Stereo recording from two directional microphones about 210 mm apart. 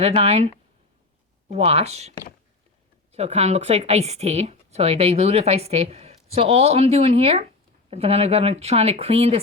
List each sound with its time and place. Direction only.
0.0 s a woman's voice: 30° right (ahead or behind)